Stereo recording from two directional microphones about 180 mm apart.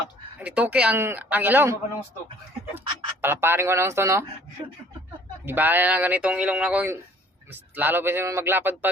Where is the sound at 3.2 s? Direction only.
15° right (ahead or behind).